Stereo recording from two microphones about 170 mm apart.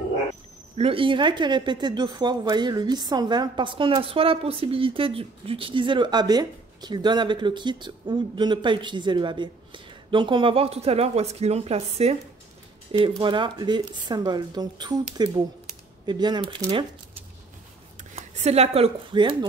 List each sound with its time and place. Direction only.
0.7 s speech: 35° right (ahead or behind)
13.2 s speech: 30° right (ahead or behind)
18.1 s speech: 40° right (ahead or behind)